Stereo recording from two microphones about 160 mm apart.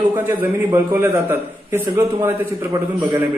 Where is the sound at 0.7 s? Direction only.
15° right (ahead or behind).